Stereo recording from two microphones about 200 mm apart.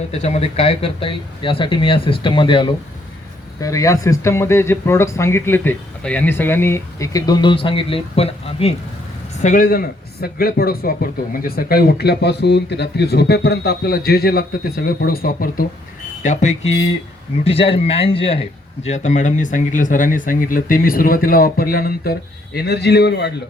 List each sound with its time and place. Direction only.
0.1 s speech: 30° left (ahead or behind)
9.4 s speech: 40° left (ahead or behind)
16.2 s speech: 35° left (ahead or behind); by 23.3 s 55° left (ahead or behind)